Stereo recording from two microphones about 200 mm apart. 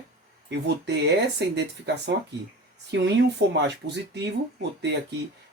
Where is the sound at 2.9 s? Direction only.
60° right (ahead or behind).